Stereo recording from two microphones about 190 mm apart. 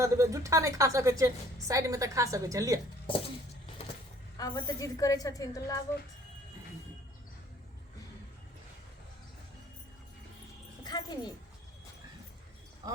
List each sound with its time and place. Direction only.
0.0 s a woman's voice: 15° right (ahead or behind)
3.1 s a sound: 25° left (ahead or behind)
4.4 s a woman's voice: 20° left (ahead or behind)
10.8 s speech: 20° left (ahead or behind)
12.8 s speech: 20° right (ahead or behind)